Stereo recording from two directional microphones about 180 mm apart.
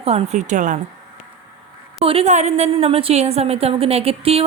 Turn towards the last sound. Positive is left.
turn(degrees=-35)  # may be behind; listen again after turning